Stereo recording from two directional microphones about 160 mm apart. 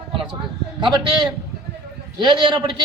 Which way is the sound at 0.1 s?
30° right (ahead or behind).